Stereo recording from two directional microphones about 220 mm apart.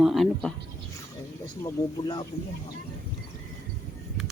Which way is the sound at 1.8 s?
20° left (ahead or behind).